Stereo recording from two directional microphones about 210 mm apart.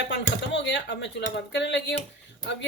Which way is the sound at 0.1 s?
55° left (ahead or behind).